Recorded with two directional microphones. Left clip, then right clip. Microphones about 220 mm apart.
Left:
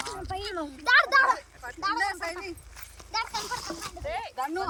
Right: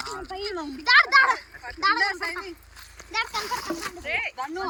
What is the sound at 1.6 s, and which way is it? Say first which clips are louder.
Speech: right 8 dB; 25° left (ahead or behind).